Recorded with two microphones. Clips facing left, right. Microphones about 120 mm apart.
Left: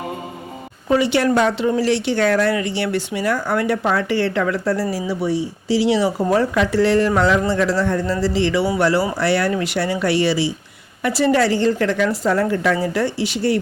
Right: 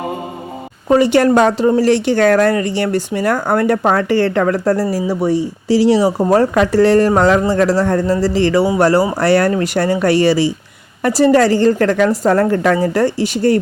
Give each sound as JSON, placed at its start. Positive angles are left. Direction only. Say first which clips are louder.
{"t": 0.9, "sound": "a woman's voice", "louder": "right 6 dB", "side_deg": -45}